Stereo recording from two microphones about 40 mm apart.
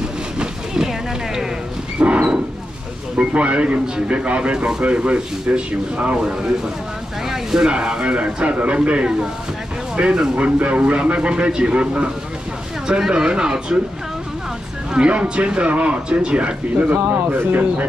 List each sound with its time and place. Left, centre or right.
0.7 s a sound: centre
2.0 s dog: right
3.2 s speech: right
7.2 s speech: centre
13.1 s speech: right
15.0 s speech: right
16.9 s speech: right